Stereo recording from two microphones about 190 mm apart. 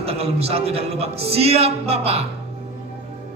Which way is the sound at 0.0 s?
30° right (ahead or behind).